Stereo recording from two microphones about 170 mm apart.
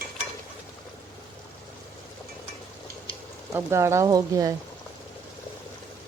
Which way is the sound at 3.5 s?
15° right (ahead or behind).